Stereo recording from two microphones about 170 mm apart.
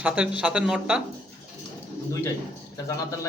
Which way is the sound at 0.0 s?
5° right (ahead or behind).